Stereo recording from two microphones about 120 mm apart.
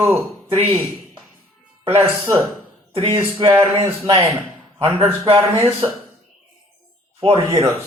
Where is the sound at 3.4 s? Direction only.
30° right (ahead or behind).